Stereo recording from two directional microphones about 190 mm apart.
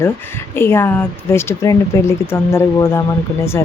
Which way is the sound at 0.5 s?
10° left (ahead or behind).